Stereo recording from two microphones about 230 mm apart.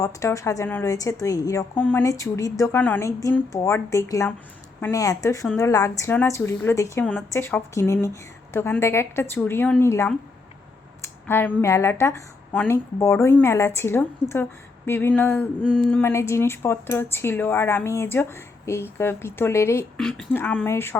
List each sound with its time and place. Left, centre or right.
0.0 s a woman's voice: centre
7.0 s a woman's voice: centre
7.3 s a woman's voice: centre
15.6 s a woman's voice: centre
15.9 s a woman's voice: centre